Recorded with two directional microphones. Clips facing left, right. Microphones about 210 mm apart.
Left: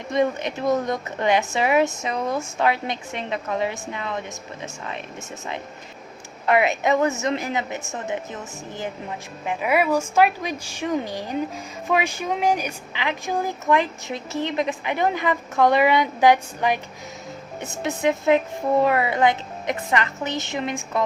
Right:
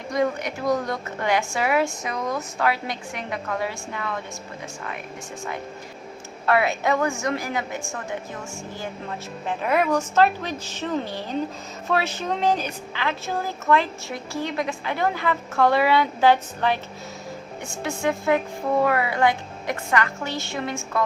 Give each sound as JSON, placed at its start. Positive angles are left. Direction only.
{"t": 0.1, "sound": "speech", "side_deg": 25}
{"t": 6.4, "sound": "speech", "side_deg": 20}
{"t": 9.5, "sound": "speech", "side_deg": 10}